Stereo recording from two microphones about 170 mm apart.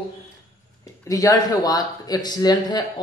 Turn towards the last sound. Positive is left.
turn(degrees=25)  # may be behind; listen again after turning